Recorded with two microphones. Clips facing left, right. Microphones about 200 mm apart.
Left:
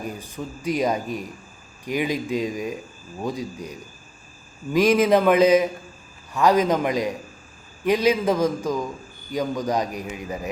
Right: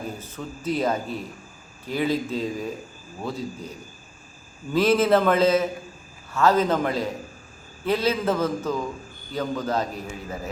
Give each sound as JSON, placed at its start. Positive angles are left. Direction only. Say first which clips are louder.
{"t": 0.0, "sound": "a man's voice", "louder": "left 2 dB", "side_deg": 15}